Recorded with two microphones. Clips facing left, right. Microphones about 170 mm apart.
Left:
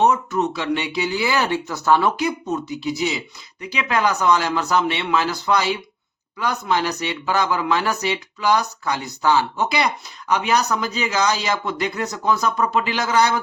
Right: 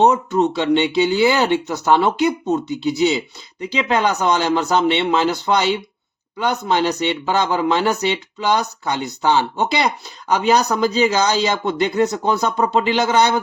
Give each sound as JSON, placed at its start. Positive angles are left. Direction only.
{"t": 0.0, "sound": "speech", "side_deg": -30}